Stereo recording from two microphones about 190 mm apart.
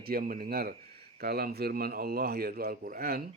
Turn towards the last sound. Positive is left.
turn(degrees=-50)  # may be behind; listen again after turning